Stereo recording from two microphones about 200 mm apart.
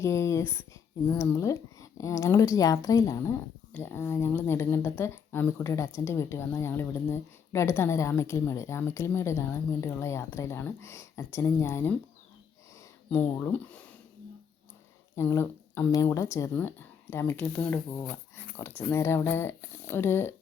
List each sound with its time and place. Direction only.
0.0 s a sound: 15° left (ahead or behind)
1.0 s speech: 10° left (ahead or behind)
13.1 s speech: 10° left (ahead or behind)
15.1 s speech: 15° left (ahead or behind)